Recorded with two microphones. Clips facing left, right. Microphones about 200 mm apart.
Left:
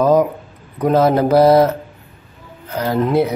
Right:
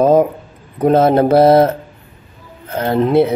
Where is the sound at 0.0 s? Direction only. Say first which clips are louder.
Right 2 dB; 25° right (ahead or behind).